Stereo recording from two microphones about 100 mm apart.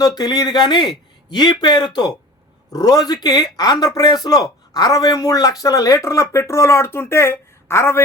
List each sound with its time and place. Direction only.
0.0 s a man's voice: 40° left (ahead or behind)